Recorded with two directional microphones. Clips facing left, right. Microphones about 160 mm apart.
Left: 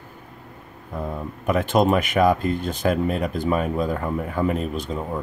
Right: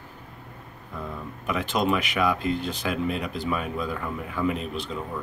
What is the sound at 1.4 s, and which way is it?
Speech, 45° left (ahead or behind).